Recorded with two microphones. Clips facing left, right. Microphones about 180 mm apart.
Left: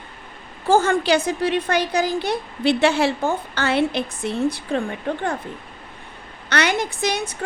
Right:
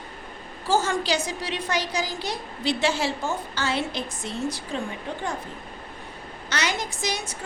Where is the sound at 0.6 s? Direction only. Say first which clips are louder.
Left 6 dB; 55° left (ahead or behind).